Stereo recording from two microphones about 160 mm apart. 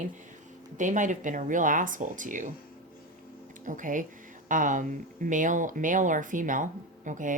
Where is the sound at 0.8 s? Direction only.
50° right (ahead or behind).